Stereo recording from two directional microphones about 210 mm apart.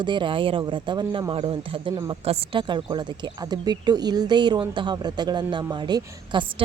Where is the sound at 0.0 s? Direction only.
20° right (ahead or behind).